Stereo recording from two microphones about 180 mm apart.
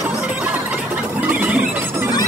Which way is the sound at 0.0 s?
5° right (ahead or behind).